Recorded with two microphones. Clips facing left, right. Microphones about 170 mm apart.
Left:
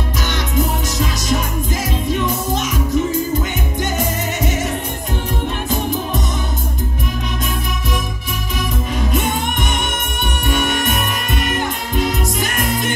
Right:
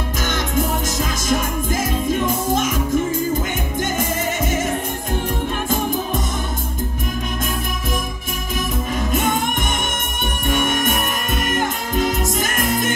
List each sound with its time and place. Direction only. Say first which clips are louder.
0.3 s music: even; 50° right (ahead or behind)
3.9 s music: left 1 dB; 50° right (ahead or behind)
8.9 s music: even; 50° right (ahead or behind)